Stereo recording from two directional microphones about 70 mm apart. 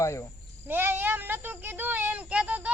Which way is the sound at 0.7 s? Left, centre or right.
Right.